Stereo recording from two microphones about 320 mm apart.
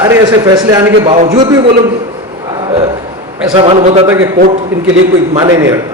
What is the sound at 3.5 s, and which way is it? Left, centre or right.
Speech, centre.